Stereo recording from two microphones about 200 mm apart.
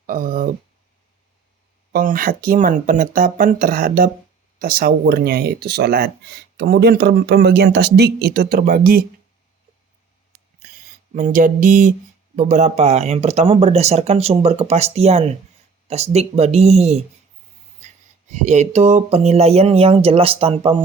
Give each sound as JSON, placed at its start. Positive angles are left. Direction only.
{"t": 0.0, "sound": "speech", "side_deg": -40}
{"t": 1.9, "sound": "speech", "side_deg": -45}
{"t": 10.6, "sound": "a sound", "side_deg": -45}
{"t": 11.1, "sound": "speech", "side_deg": -40}
{"t": 18.3, "sound": "speech", "side_deg": -35}